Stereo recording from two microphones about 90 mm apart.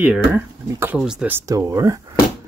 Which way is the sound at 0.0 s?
20° right (ahead or behind).